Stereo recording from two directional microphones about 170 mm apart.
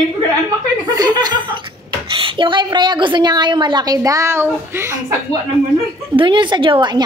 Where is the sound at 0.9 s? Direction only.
25° right (ahead or behind).